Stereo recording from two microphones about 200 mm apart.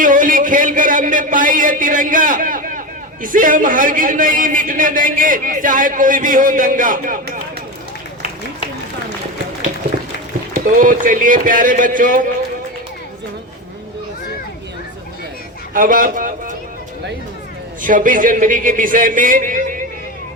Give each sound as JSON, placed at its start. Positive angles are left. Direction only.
{"t": 0.0, "sound": "a man's voice", "side_deg": -40}
{"t": 10.5, "sound": "a man's voice", "side_deg": -40}
{"t": 15.7, "sound": "a man's voice", "side_deg": -40}
{"t": 17.8, "sound": "a man's voice", "side_deg": -40}